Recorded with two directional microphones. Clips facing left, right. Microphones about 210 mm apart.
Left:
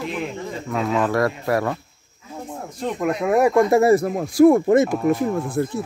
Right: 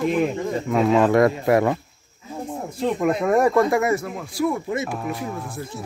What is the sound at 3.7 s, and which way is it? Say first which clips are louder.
Speech: left 6 dB; 35° left (ahead or behind).